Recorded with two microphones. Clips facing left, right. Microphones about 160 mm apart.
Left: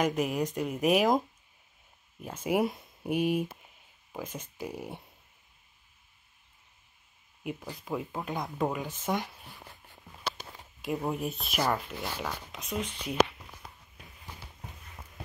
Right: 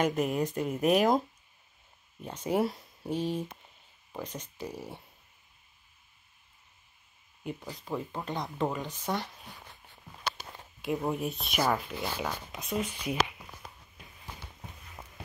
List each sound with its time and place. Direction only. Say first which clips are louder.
0.0 s speech: even; centre (ahead or behind)
2.2 s speech: left 1 dB; 5° left (ahead or behind)
2.6 s speech: even; 20° left (ahead or behind)
4.6 s speech: left 2 dB; 15° left (ahead or behind)
7.4 s speech: left 1 dB; 5° left (ahead or behind)
10.8 s speech: right 1 dB; centre (ahead or behind)